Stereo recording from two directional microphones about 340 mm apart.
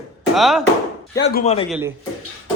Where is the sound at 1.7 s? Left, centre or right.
Centre.